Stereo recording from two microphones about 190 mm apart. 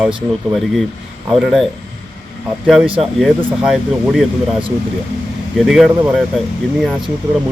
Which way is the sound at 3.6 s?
5° right (ahead or behind).